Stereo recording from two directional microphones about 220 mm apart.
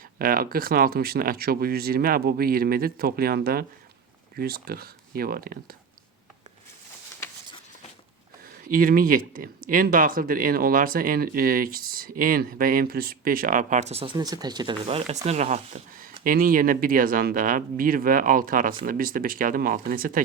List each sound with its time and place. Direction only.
0.2 s speech: 40° right (ahead or behind)
8.7 s speech: 40° right (ahead or behind)